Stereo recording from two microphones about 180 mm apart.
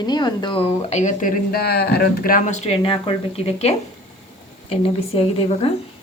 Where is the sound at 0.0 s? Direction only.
25° left (ahead or behind); by 1.3 s 40° left (ahead or behind).